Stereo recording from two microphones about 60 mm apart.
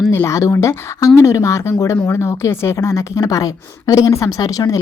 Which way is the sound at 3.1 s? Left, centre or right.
Left.